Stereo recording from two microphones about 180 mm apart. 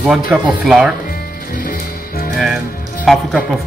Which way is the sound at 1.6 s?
50° left (ahead or behind).